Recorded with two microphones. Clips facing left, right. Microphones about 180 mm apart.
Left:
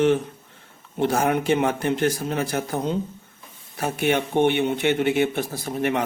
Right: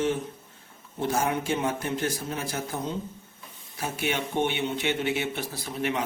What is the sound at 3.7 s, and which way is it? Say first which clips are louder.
Speech: left 7 dB; 55° left (ahead or behind).